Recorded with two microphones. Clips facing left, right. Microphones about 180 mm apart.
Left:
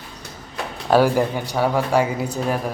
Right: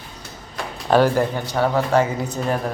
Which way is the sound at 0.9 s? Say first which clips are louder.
Even; 10° left (ahead or behind).